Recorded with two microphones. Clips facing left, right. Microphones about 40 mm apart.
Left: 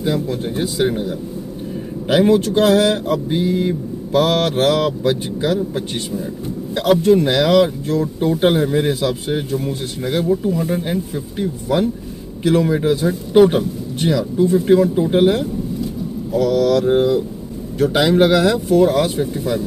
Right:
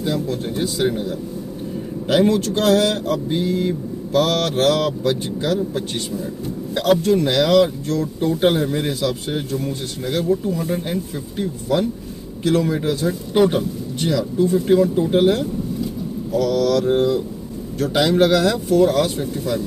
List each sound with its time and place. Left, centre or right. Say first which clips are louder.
0.0 s speech: left 2 dB; centre